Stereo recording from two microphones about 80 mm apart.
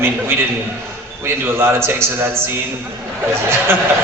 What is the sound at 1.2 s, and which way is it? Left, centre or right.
A man's voice, right.